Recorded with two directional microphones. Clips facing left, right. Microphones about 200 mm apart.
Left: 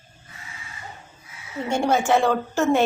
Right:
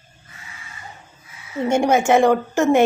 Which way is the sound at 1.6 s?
20° right (ahead or behind).